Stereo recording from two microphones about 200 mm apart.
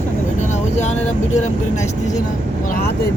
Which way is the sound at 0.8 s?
35° left (ahead or behind).